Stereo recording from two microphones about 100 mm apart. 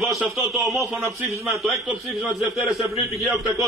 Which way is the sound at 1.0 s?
30° right (ahead or behind).